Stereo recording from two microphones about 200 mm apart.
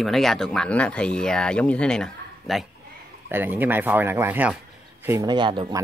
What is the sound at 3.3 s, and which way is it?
Speech, 10° right (ahead or behind).